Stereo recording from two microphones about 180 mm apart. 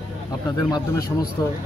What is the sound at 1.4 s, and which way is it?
Speech, 20° left (ahead or behind).